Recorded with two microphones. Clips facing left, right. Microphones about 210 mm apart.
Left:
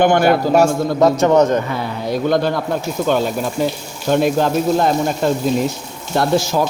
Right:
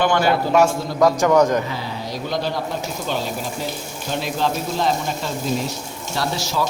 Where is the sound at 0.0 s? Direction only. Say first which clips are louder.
Left 5 dB; 55° left (ahead or behind).